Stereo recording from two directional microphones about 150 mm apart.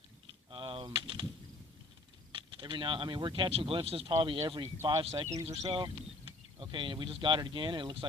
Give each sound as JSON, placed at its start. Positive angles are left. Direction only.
{"t": 0.5, "sound": "speech", "side_deg": -35}
{"t": 2.3, "sound": "speech", "side_deg": -35}
{"t": 4.6, "sound": "speech", "side_deg": -25}